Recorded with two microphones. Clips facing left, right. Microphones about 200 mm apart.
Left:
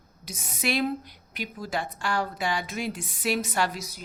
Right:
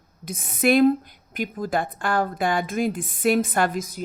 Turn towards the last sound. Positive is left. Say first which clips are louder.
# right 5 dB
turn(degrees=-50)  # may be behind; listen again after turning